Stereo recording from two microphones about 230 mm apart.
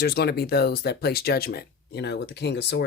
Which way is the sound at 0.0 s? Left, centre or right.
Left.